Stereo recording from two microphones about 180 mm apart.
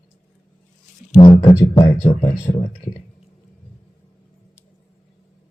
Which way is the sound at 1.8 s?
30° left (ahead or behind).